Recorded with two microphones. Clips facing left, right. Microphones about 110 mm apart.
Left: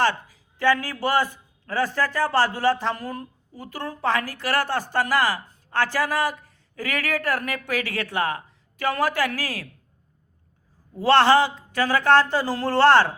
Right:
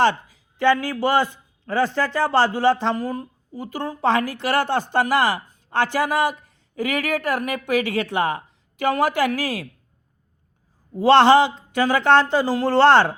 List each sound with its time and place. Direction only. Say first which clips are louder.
0.0 s a man's voice: right 4 dB; 20° right (ahead or behind)
10.9 s a man's voice: right 4 dB; 20° right (ahead or behind)